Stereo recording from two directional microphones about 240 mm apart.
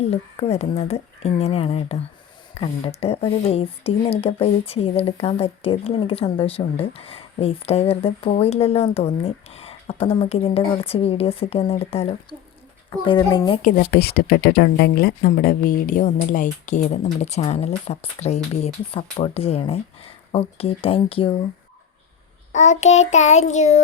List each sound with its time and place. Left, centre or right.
0.0 s a woman's voice: left
13.6 s speech: left
22.5 s speech: left